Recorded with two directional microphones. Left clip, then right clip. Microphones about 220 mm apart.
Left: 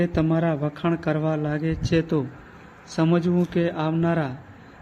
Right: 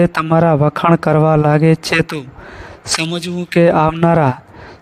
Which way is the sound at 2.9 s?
Centre (ahead or behind).